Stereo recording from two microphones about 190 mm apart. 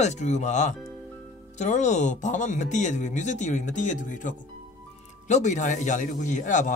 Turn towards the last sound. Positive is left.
turn(degrees=40)  # may be behind; listen again after turning